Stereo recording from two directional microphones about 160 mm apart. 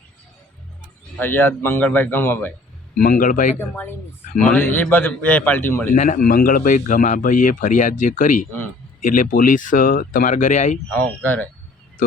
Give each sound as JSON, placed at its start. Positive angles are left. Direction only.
{"t": 1.2, "sound": "a man's voice", "side_deg": 15}
{"t": 3.0, "sound": "a man's voice", "side_deg": 60}
{"t": 4.5, "sound": "a man's voice", "side_deg": 10}
{"t": 5.9, "sound": "a man's voice", "side_deg": 55}
{"t": 10.9, "sound": "a man's voice", "side_deg": 10}